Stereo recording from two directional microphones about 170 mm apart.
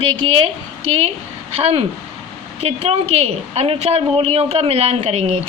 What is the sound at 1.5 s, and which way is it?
A woman's voice, 35° right (ahead or behind).